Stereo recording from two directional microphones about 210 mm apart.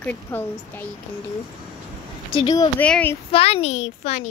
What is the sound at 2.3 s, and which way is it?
Speech, 20° left (ahead or behind).